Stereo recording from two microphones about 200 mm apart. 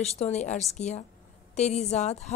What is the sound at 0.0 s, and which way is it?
A woman's voice, 35° left (ahead or behind).